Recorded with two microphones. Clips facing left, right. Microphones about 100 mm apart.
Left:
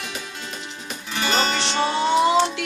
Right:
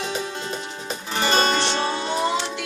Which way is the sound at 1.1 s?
40° right (ahead or behind).